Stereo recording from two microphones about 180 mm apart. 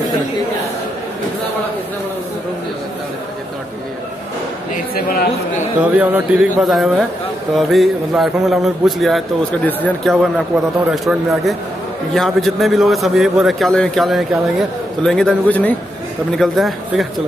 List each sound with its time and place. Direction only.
5.8 s a man's voice: 10° right (ahead or behind)